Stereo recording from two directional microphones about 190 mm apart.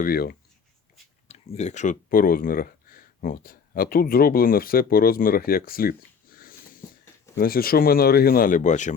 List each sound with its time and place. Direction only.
0.0 s speech: 50° left (ahead or behind)
1.3 s speech: 35° left (ahead or behind)